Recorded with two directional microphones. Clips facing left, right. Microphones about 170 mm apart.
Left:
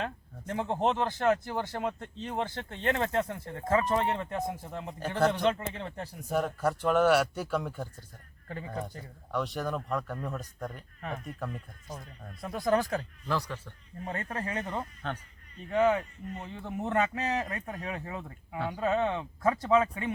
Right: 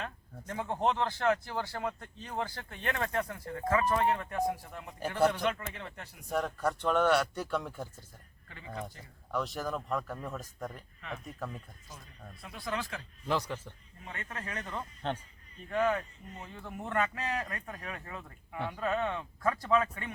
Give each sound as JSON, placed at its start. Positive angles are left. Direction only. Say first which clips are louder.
{"t": 0.0, "sound": "speech", "louder": "left 5 dB", "side_deg": 25}
{"t": 6.2, "sound": "speech", "louder": "left 3 dB", "side_deg": 0}
{"t": 8.4, "sound": "speech", "louder": "left 6 dB", "side_deg": 40}
{"t": 9.3, "sound": "speech", "louder": "left 2 dB", "side_deg": 0}
{"t": 12.4, "sound": "speech", "louder": "left 10 dB", "side_deg": 45}
{"t": 13.2, "sound": "speech", "louder": "even", "side_deg": -20}
{"t": 14.0, "sound": "speech", "louder": "left 7 dB", "side_deg": 35}
{"t": 15.0, "sound": "speech", "louder": "right 6 dB", "side_deg": -25}
{"t": 15.7, "sound": "speech", "louder": "left 4 dB", "side_deg": 20}